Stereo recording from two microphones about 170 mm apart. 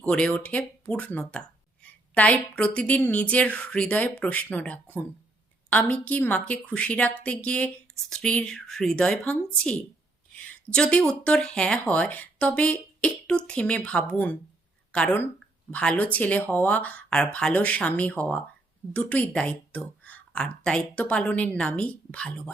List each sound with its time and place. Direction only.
0.0 s speech: 5° left (ahead or behind)